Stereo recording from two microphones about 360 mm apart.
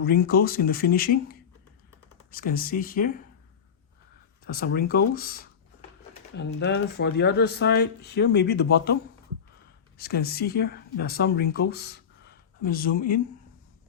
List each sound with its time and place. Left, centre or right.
0.0 s speech: left
4.4 s speech: left
10.0 s speech: left